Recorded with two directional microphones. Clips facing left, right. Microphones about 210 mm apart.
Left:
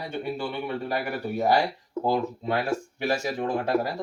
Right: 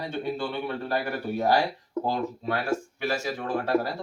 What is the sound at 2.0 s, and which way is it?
Speech, 20° left (ahead or behind).